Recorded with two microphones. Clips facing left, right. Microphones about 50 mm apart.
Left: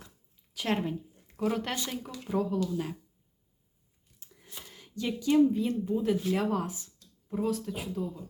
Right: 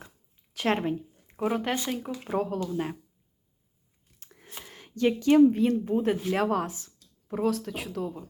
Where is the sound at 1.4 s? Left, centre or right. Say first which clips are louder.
Right 3 dB; right.